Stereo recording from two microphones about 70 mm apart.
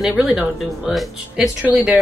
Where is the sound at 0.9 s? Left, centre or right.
Centre.